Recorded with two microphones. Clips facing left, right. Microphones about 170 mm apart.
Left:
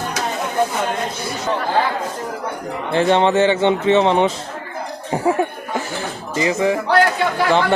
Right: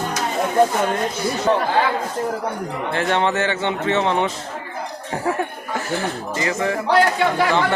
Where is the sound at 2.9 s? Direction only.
25° left (ahead or behind).